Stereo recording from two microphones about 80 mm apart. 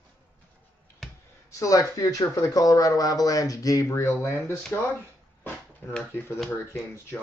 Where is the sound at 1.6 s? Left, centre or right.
Left.